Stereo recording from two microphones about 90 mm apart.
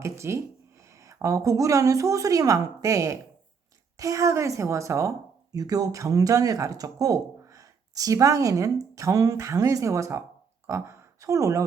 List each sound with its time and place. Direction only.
0.0 s speech: 30° right (ahead or behind)